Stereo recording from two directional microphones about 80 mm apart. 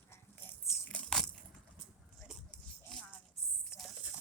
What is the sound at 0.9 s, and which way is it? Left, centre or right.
Crushing, centre.